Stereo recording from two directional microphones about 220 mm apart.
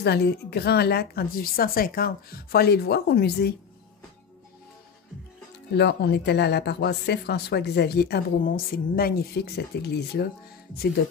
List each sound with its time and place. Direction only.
0.0 s speech: 50° left (ahead or behind)
5.8 s speech: 50° left (ahead or behind)